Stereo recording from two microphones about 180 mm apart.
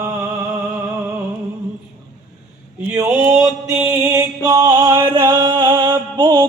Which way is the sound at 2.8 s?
10° right (ahead or behind).